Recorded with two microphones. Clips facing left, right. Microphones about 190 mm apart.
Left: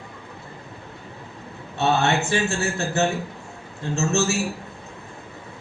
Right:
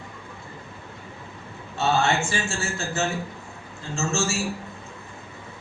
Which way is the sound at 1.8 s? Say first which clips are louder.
Left 2 dB; 60° left (ahead or behind).